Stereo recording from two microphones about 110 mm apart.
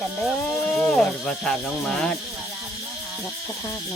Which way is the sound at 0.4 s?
10° left (ahead or behind).